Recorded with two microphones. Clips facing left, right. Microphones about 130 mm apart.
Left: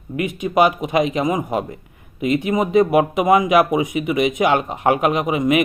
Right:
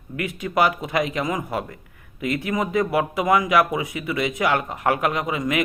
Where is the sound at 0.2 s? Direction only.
20° left (ahead or behind).